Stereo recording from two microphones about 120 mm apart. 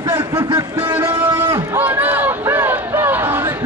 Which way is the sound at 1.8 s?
15° right (ahead or behind).